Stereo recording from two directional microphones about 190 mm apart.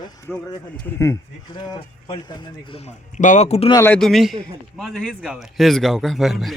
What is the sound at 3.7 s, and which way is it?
A man's voice, 10° left (ahead or behind).